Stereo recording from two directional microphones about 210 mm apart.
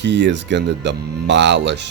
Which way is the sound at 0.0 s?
55° right (ahead or behind).